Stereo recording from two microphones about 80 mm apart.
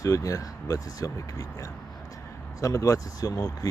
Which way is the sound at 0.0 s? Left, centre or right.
Left.